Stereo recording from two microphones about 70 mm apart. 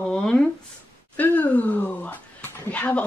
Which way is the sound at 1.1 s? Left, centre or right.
Left.